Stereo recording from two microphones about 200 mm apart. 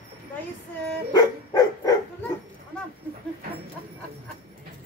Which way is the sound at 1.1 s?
20° left (ahead or behind).